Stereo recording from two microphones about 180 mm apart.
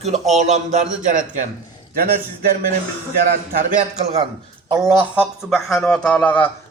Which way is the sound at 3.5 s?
50° right (ahead or behind).